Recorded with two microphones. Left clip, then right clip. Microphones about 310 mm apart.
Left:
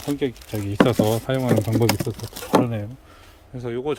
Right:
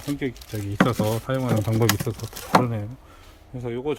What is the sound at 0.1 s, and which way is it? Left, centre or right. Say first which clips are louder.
Speech: left 4 dB; centre.